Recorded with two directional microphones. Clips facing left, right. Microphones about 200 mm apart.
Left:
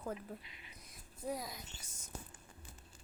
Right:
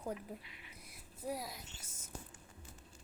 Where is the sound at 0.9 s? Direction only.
10° right (ahead or behind).